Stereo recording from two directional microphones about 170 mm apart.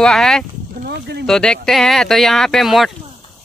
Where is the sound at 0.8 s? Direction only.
75° right (ahead or behind).